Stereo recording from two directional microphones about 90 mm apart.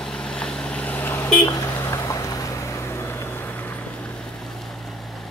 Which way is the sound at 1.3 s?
40° left (ahead or behind).